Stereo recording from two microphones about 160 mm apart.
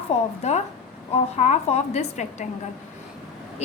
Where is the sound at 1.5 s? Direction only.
45° left (ahead or behind).